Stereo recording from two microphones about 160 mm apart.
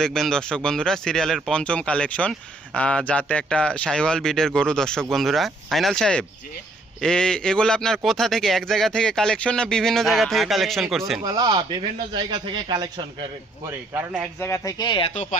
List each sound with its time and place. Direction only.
0.0 s a man's voice: 5° left (ahead or behind)
11.2 s speech: 25° right (ahead or behind)
14.3 s speech: 15° left (ahead or behind)
15.1 s speech: 50° left (ahead or behind)